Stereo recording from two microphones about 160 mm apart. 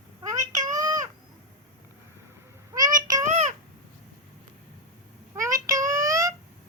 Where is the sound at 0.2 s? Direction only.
20° right (ahead or behind).